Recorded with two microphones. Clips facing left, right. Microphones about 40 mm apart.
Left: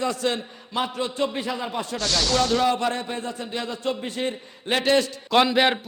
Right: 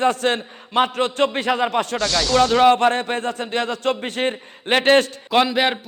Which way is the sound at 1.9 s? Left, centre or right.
Centre.